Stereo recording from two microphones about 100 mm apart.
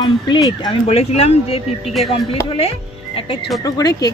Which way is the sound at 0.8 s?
90° left.